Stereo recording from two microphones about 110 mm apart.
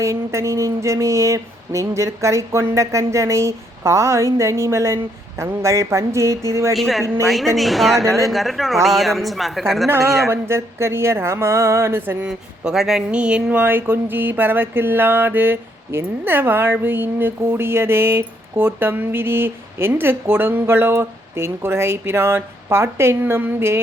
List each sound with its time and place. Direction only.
0.0 s speech: 25° right (ahead or behind)
6.7 s a woman's voice: centre (ahead or behind)
7.0 s speech: 25° right (ahead or behind)
7.5 s a woman's voice: centre (ahead or behind)
10.2 s speech: 25° right (ahead or behind)
12.6 s speech: 5° right (ahead or behind); by 23.8 s 20° right (ahead or behind)